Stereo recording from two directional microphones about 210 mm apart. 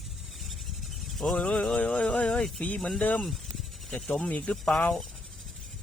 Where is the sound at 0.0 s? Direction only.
Centre (ahead or behind).